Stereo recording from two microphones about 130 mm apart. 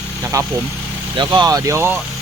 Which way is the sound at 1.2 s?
30° right (ahead or behind).